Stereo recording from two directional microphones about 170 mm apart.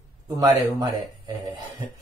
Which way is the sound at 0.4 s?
20° right (ahead or behind).